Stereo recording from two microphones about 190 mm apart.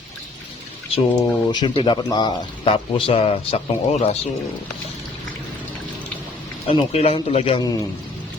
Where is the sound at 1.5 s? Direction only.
25° left (ahead or behind).